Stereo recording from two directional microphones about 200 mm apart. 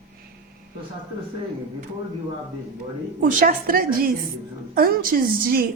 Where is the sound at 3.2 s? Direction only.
40° right (ahead or behind).